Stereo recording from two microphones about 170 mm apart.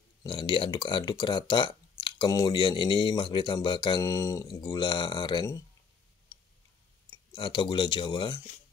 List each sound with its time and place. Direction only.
0.2 s speech: 25° left (ahead or behind)
6.3 s tick-tock: 20° left (ahead or behind)
7.1 s speech: 30° left (ahead or behind)